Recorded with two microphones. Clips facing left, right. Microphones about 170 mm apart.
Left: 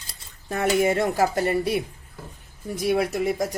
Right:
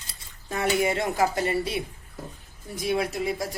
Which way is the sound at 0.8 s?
50° left (ahead or behind).